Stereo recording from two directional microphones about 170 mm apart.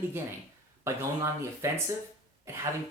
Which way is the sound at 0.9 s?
15° right (ahead or behind).